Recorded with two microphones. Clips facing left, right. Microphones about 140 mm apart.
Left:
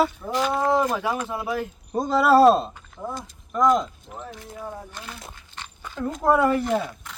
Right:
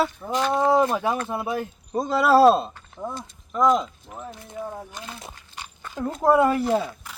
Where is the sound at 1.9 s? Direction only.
Centre (ahead or behind).